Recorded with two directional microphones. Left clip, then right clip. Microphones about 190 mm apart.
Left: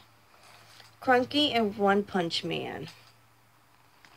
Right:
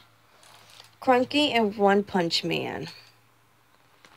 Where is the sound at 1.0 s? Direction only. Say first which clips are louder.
Right 3 dB; 30° right (ahead or behind).